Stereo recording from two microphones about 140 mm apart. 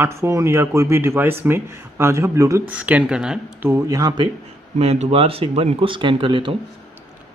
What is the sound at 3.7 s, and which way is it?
Speech, 25° right (ahead or behind).